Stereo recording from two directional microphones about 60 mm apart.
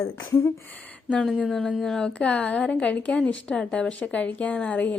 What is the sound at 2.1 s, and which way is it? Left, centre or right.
A woman's voice, left.